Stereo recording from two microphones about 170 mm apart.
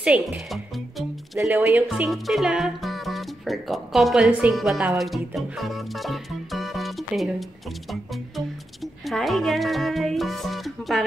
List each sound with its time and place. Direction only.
0.0 s music: 5° right (ahead or behind)
1.6 s speech: 10° right (ahead or behind)
1.9 s speech: centre (ahead or behind)
9.0 s music: centre (ahead or behind)